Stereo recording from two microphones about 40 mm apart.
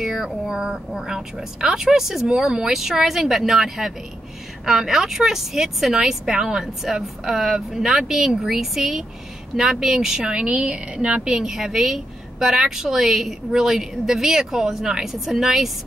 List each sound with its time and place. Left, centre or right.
0.0 s a woman's voice: centre
10.3 s a woman's voice: right
11.2 s a woman's voice: centre